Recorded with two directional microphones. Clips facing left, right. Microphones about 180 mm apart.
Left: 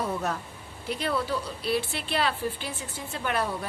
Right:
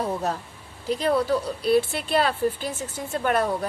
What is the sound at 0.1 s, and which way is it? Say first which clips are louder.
A woman's voice: right 3 dB; 35° right (ahead or behind).